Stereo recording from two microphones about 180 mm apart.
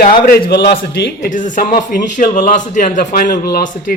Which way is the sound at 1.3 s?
45° left (ahead or behind).